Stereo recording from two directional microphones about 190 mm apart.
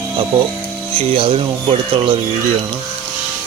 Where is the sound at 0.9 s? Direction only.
30° right (ahead or behind).